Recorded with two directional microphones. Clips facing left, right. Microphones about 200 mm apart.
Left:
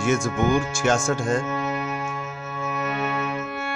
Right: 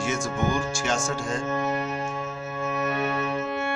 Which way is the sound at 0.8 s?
55° left (ahead or behind).